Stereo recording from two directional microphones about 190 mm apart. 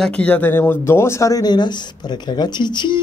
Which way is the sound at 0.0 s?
5° left (ahead or behind).